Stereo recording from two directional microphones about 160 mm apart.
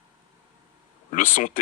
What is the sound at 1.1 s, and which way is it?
Speech, 55° left (ahead or behind).